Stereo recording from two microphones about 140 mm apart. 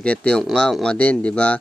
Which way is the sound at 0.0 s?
10° left (ahead or behind).